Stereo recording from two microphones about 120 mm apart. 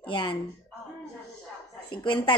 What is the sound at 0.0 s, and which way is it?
Speech, 45° left (ahead or behind).